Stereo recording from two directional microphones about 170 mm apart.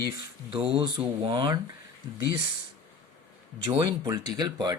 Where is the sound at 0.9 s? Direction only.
30° right (ahead or behind).